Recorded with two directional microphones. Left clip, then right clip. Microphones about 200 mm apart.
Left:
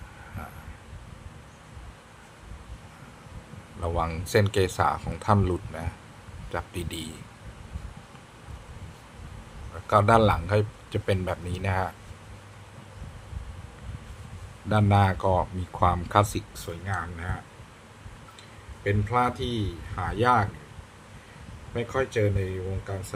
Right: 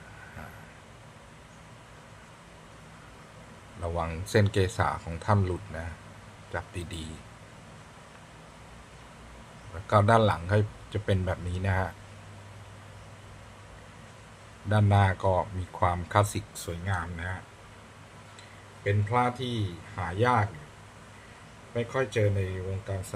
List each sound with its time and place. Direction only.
3.8 s speech: 15° left (ahead or behind)
9.8 s speech: 15° left (ahead or behind)
14.7 s speech: 15° left (ahead or behind)
18.9 s a man's voice: 20° left (ahead or behind)
21.8 s speech: 20° left (ahead or behind)